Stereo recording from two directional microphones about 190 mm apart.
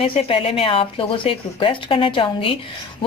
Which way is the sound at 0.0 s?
30° left (ahead or behind).